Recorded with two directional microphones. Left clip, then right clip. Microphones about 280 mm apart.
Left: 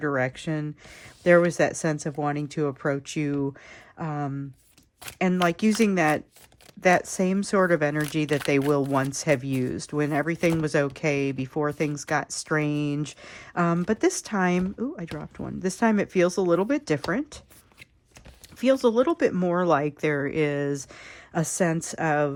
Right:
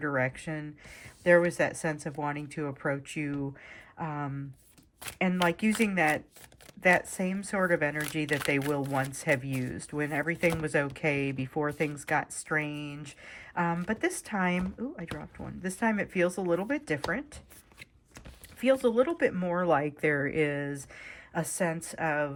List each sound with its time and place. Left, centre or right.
0.0 s speech: centre
18.6 s speech: centre